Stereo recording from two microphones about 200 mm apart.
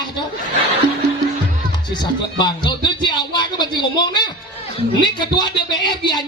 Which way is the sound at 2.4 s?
20° left (ahead or behind).